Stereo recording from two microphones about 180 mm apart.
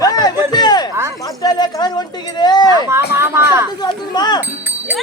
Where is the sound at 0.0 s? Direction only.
20° left (ahead or behind).